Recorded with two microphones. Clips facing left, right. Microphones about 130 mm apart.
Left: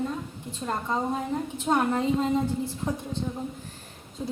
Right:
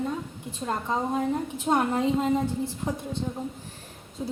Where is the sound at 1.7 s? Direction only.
15° right (ahead or behind).